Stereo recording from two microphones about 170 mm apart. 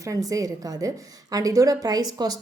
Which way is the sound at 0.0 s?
20° right (ahead or behind).